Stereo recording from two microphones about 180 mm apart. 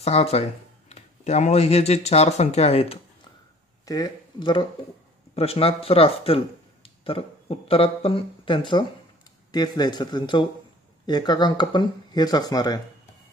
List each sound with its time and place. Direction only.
0.0 s speech: 35° left (ahead or behind)
3.8 s speech: 20° left (ahead or behind)